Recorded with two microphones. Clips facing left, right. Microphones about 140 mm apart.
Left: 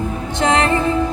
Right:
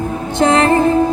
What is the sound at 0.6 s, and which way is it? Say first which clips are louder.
Music: right 5 dB; 40° right (ahead or behind).